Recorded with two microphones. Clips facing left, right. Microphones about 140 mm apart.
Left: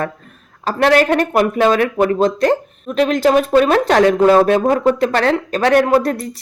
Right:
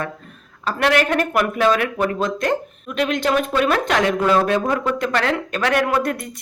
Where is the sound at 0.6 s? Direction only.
35° left (ahead or behind).